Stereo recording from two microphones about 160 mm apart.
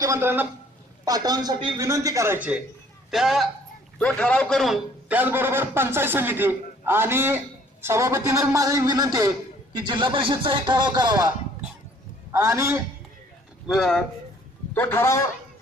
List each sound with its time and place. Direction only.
0.0 s a man's voice: 15° right (ahead or behind)
1.0 s a man's voice: 25° right (ahead or behind)
12.3 s a man's voice: 20° right (ahead or behind)
13.7 s a man's voice: 5° left (ahead or behind)
14.8 s a man's voice: 15° left (ahead or behind)